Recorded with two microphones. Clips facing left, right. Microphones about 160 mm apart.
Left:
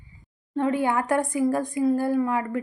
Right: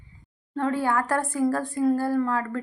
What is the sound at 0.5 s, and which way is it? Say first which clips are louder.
Speech: left 1 dB; 20° left (ahead or behind).